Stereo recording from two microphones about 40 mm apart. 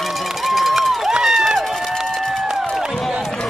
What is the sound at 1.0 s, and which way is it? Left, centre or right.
Run, centre.